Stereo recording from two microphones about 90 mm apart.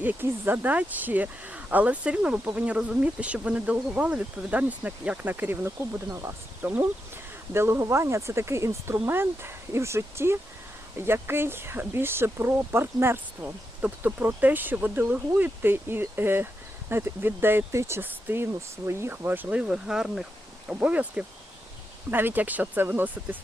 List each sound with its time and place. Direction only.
0.0 s speech: 20° right (ahead or behind)
7.5 s speech: 30° right (ahead or behind)